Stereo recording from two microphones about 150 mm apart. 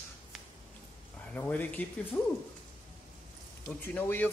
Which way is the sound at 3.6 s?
10° left (ahead or behind).